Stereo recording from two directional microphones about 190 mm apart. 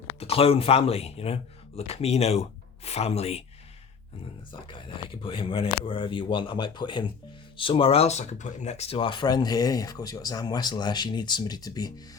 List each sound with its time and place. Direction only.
0.2 s speech: 30° left (ahead or behind)
4.7 s speech: 25° left (ahead or behind)